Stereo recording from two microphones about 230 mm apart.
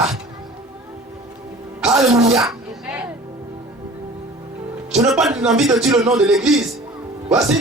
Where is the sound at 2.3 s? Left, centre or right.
Centre.